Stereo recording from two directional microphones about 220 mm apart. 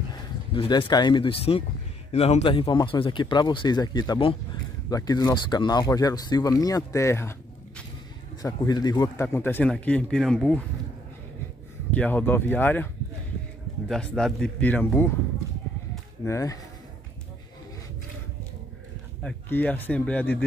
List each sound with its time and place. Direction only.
0.6 s speech: 20° left (ahead or behind); by 10.6 s centre (ahead or behind)
11.9 s speech: 10° left (ahead or behind)
16.3 s speech: 15° left (ahead or behind)
19.2 s speech: 5° left (ahead or behind)